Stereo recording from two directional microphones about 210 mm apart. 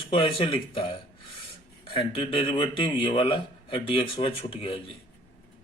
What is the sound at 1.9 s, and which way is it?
Speech, 25° left (ahead or behind).